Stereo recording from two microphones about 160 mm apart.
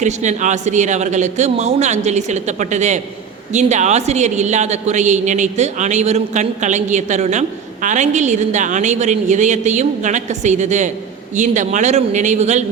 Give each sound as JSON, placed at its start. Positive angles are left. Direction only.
{"t": 0.0, "sound": "a man's voice", "side_deg": -50}